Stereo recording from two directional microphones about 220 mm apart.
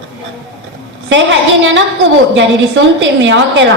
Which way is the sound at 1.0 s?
55° right (ahead or behind).